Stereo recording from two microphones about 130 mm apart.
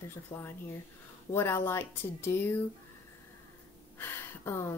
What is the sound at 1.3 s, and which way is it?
Speech, 20° left (ahead or behind).